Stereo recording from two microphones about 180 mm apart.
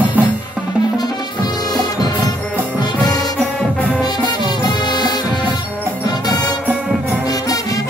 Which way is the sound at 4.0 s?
25° left (ahead or behind).